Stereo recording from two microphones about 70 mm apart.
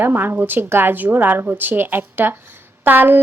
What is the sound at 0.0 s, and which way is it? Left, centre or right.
A woman's voice, right.